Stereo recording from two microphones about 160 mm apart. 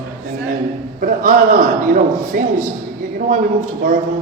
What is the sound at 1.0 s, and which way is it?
A man's voice, 60° right (ahead or behind).